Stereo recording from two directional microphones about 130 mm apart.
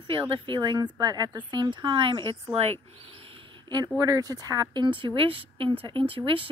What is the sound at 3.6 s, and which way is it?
Speech, 35° right (ahead or behind).